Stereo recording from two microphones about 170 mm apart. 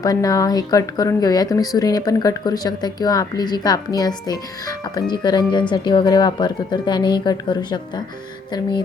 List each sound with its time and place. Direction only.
0.0 s speech: 20° left (ahead or behind)